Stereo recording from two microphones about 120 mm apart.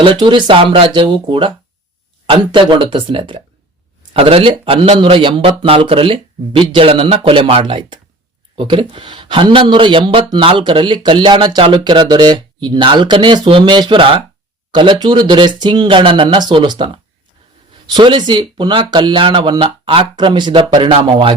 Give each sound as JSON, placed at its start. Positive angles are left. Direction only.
{"t": 0.0, "sound": "speech", "side_deg": -45}